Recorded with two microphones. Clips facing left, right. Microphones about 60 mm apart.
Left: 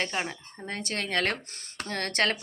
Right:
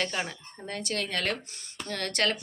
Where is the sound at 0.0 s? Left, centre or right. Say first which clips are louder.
Left 1 dB; left.